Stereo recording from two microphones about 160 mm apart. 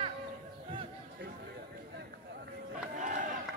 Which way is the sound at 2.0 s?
90° right.